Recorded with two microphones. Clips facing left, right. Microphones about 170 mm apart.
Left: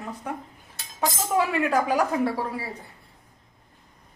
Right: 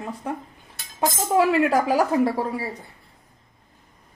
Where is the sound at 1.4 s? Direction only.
35° right (ahead or behind).